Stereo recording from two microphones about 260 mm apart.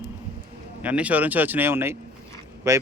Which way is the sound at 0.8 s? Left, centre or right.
Centre.